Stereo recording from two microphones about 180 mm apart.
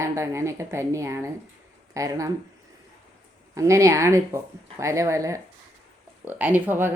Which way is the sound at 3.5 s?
15° right (ahead or behind).